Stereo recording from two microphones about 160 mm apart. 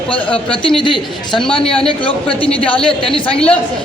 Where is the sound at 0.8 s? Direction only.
30° left (ahead or behind).